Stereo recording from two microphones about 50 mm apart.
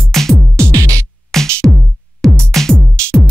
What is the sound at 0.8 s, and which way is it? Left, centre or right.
Music, right.